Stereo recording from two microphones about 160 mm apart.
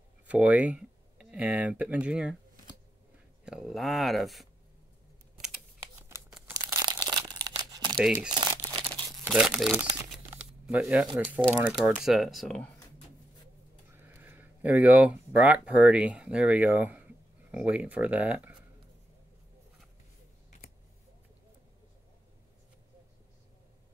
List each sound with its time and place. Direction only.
0.3 s speech: 10° right (ahead or behind)
3.4 s speech: 5° right (ahead or behind)
5.8 s typewriter: 15° right (ahead or behind)
6.5 s crumpling: 20° right (ahead or behind)
8.0 s speech: 5° right (ahead or behind)
8.4 s crumpling: 30° right (ahead or behind)
9.3 s speech: centre (ahead or behind)
10.1 s a sound: 10° right (ahead or behind)
11.8 s speech: centre (ahead or behind)
13.9 s speech: 10° right (ahead or behind)